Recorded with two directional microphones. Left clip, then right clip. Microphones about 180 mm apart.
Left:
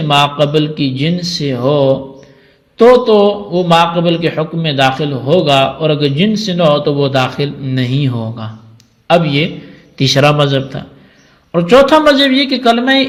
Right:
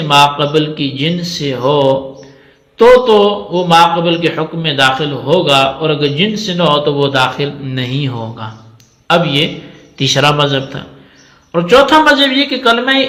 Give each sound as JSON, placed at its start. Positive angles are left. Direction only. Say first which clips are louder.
{"t": 0.1, "sound": "a man's voice", "louder": "right 2 dB", "side_deg": 40}